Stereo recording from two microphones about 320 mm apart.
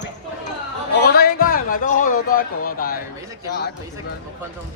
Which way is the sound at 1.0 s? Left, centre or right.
Left.